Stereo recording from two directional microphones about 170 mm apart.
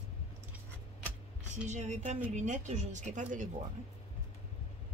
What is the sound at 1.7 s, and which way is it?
A woman's voice, 45° right (ahead or behind).